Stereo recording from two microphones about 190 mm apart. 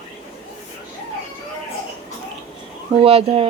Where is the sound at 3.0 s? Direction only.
30° right (ahead or behind).